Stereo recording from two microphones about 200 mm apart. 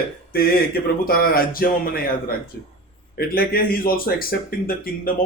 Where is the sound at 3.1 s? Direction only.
50° left (ahead or behind).